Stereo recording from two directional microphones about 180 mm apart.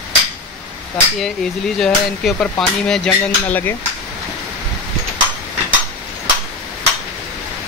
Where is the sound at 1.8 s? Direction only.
5° left (ahead or behind).